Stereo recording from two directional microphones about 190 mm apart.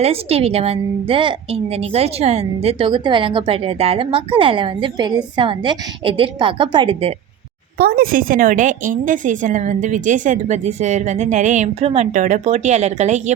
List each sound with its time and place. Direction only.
0.0 s a woman's voice: 30° right (ahead or behind)
7.8 s a woman's voice: 50° right (ahead or behind)